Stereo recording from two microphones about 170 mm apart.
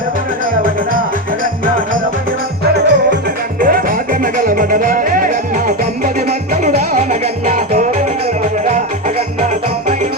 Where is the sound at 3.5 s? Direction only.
55° right (ahead or behind).